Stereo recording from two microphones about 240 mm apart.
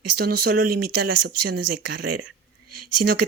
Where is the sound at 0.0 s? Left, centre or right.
Right.